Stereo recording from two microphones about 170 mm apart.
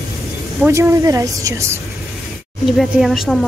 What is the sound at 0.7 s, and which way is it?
Speech, 15° right (ahead or behind).